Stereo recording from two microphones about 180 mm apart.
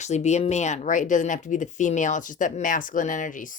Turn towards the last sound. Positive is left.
turn(degrees=45)  # may be behind; listen again after turning